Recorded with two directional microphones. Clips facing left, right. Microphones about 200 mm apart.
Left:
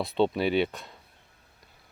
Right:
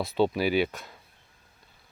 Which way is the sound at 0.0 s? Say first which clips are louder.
Even; centre (ahead or behind).